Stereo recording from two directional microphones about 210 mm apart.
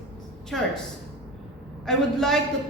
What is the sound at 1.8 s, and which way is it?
Speech, centre (ahead or behind).